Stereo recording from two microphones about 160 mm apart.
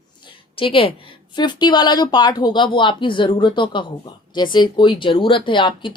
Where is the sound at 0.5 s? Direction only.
35° left (ahead or behind).